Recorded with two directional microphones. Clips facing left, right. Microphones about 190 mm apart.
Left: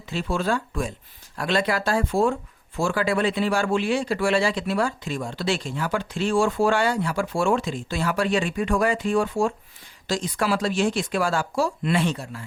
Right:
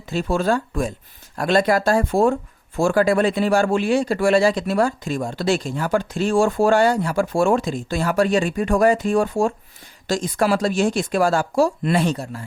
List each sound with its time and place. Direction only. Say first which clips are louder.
0.0 s speech: right 5 dB; 45° right (ahead or behind)